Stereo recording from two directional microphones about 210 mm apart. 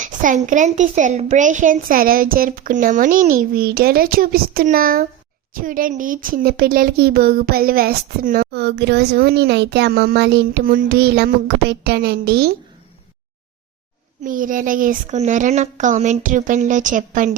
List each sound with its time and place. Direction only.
0.0 s a woman's voice: 40° right (ahead or behind)
14.3 s a woman's voice: 40° right (ahead or behind)